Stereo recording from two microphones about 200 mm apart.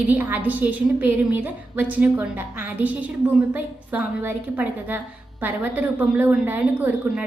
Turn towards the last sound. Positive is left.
turn(degrees=-10)  # may be behind; listen again after turning